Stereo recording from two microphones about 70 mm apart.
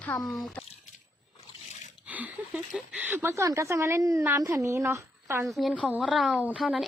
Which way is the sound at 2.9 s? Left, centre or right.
Right.